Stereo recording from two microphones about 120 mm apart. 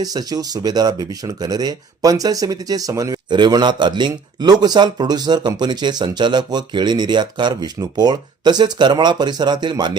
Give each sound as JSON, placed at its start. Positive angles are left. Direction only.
{"t": 0.0, "sound": "speech", "side_deg": -30}